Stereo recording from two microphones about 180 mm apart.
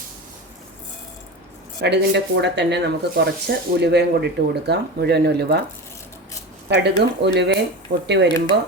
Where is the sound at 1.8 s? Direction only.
70° right (ahead or behind).